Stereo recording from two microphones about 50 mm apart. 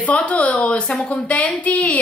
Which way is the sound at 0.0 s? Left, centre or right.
Left.